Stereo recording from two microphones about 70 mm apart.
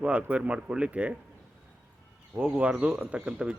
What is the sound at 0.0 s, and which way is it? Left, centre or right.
Speech, centre.